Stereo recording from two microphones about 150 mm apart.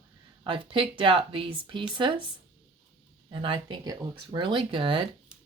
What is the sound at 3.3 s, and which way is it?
Speech, 35° right (ahead or behind).